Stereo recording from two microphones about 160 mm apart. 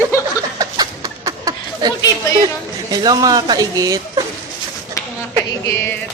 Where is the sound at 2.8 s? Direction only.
25° right (ahead or behind).